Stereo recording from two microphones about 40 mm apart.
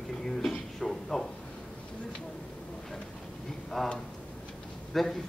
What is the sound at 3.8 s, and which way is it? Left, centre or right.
Speech, centre.